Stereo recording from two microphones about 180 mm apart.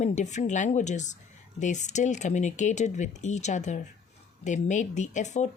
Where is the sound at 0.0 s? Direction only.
40° left (ahead or behind).